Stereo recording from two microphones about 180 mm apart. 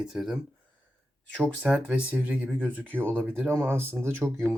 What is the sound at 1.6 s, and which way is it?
Speech, 5° right (ahead or behind).